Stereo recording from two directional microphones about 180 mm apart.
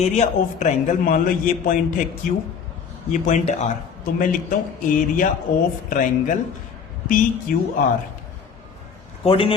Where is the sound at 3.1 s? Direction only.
45° left (ahead or behind).